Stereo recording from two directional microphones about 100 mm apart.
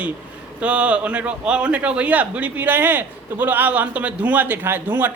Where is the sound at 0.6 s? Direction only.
10° right (ahead or behind).